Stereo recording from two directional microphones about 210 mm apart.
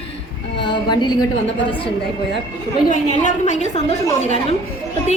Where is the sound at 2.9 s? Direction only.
35° left (ahead or behind).